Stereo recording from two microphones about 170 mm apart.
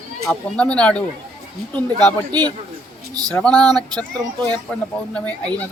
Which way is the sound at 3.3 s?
5° left (ahead or behind).